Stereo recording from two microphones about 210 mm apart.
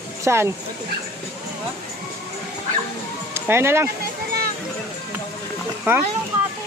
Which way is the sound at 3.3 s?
10° right (ahead or behind).